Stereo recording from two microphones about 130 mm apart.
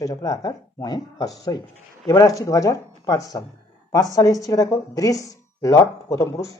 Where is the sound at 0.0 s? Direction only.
25° left (ahead or behind).